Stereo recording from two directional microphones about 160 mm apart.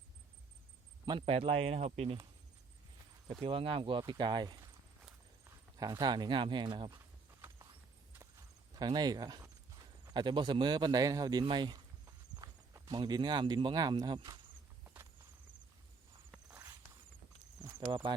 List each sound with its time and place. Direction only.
1.2 s speech: 40° right (ahead or behind)
3.4 s speech: 35° right (ahead or behind)
8.7 s speech: 25° right (ahead or behind)
17.6 s cricket: 30° right (ahead or behind)